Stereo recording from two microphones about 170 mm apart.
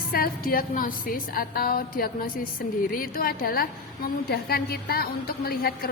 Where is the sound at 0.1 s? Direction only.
60° left (ahead or behind).